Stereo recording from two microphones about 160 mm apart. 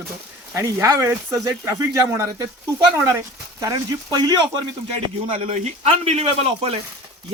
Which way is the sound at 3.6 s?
25° right (ahead or behind).